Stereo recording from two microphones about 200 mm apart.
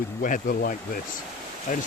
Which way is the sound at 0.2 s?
45° left (ahead or behind).